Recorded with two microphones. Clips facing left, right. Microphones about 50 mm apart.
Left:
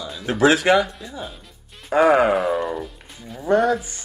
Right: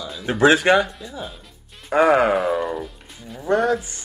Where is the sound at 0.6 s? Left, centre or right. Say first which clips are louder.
Even; right.